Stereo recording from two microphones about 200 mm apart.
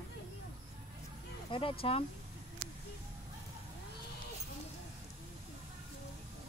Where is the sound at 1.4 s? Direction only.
25° left (ahead or behind).